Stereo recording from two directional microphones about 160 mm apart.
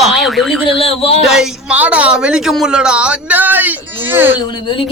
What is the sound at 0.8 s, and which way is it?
Speech, 40° left (ahead or behind).